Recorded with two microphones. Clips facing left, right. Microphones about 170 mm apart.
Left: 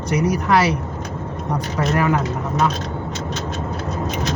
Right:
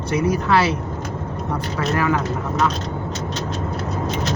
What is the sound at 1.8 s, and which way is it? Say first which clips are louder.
Speech: left 2 dB; 15° left (ahead or behind).